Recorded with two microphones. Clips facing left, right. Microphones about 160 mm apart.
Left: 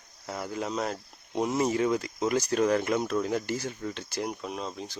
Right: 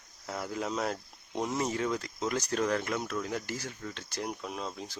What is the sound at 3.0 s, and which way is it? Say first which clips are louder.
Speech: left 6 dB; 30° left (ahead or behind).